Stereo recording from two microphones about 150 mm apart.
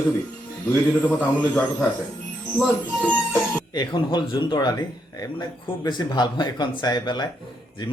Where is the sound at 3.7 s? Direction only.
30° left (ahead or behind).